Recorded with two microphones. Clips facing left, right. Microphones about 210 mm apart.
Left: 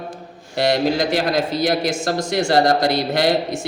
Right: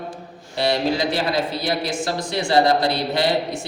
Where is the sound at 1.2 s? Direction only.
45° left (ahead or behind).